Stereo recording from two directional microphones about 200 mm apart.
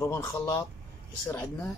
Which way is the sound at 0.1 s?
15° left (ahead or behind).